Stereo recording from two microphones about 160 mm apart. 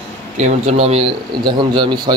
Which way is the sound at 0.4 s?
45° right (ahead or behind).